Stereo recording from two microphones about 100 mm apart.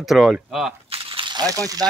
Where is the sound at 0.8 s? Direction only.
65° right (ahead or behind); by 1.8 s 40° right (ahead or behind).